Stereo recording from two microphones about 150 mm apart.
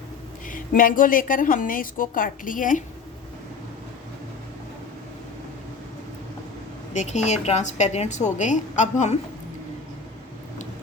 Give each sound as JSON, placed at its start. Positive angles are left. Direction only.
{"t": 0.4, "sound": "a woman's voice", "side_deg": 65}
{"t": 6.9, "sound": "a woman's voice", "side_deg": 50}